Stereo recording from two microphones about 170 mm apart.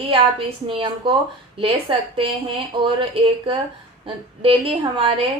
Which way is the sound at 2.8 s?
30° right (ahead or behind).